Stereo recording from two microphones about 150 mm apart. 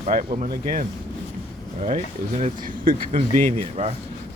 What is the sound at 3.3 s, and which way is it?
Speech, 15° left (ahead or behind).